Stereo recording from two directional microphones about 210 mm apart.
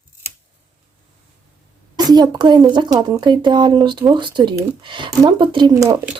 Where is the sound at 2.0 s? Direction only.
20° right (ahead or behind).